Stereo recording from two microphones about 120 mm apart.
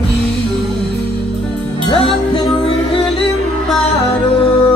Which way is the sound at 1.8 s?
45° left (ahead or behind).